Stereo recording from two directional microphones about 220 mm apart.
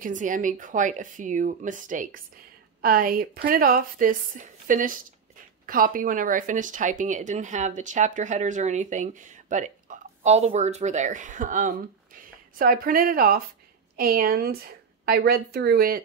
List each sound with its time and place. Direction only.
0.0 s a woman's voice: 35° right (ahead or behind)